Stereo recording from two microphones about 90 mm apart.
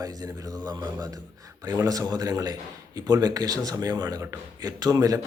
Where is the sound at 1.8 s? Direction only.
40° right (ahead or behind).